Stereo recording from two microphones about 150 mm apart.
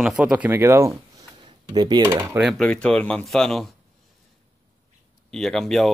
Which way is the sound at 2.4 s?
Centre (ahead or behind).